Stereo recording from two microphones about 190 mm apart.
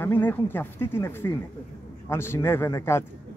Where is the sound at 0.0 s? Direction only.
10° left (ahead or behind).